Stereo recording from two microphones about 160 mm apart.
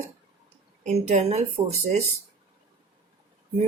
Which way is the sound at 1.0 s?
45° right (ahead or behind).